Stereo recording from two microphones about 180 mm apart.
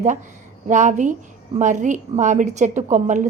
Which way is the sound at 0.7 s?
45° right (ahead or behind).